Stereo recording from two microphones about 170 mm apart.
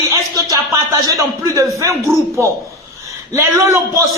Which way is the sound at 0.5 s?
20° right (ahead or behind).